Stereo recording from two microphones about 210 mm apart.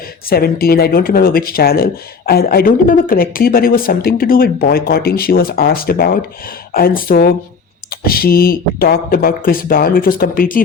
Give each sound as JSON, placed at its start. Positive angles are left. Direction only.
{"t": 0.3, "sound": "speech", "side_deg": 45}